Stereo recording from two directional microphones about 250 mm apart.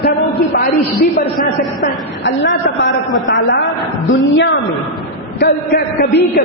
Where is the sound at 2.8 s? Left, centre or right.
Left.